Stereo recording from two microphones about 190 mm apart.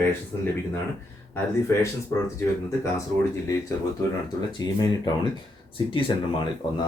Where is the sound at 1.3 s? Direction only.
15° left (ahead or behind).